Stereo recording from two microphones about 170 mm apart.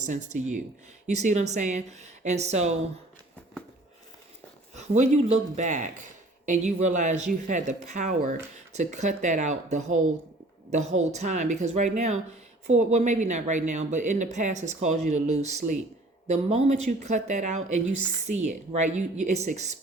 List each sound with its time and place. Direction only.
0.0 s speech: 45° right (ahead or behind)
4.7 s speech: 40° right (ahead or behind)